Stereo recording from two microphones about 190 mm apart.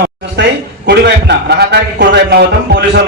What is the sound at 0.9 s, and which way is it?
A man's voice, 60° right (ahead or behind).